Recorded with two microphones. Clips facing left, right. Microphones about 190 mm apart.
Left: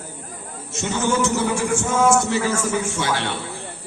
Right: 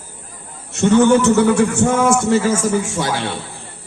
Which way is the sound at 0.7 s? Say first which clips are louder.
Right 11 dB; 60° right (ahead or behind).